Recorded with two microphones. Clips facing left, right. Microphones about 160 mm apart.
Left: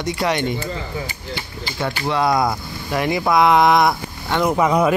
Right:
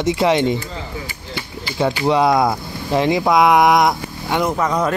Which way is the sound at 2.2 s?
Centre (ahead or behind).